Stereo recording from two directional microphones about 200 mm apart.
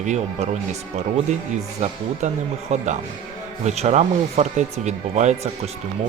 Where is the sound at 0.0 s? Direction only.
35° right (ahead or behind).